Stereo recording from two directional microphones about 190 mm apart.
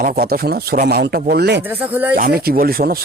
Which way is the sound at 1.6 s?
10° right (ahead or behind).